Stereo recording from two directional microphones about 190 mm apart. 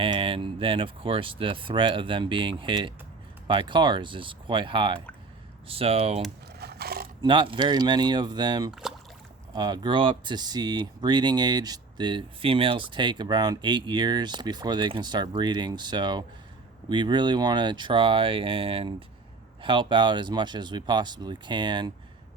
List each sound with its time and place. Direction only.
0.0 s speech: 30° right (ahead or behind)
6.6 s a sound: 55° right (ahead or behind)
7.2 s speech: 25° right (ahead or behind)